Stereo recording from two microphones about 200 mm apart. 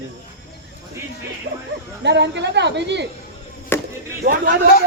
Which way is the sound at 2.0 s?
60° right (ahead or behind).